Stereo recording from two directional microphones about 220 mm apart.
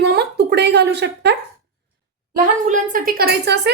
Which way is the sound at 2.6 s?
35° right (ahead or behind).